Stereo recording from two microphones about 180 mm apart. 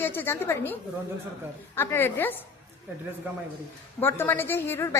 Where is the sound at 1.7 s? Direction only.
10° left (ahead or behind).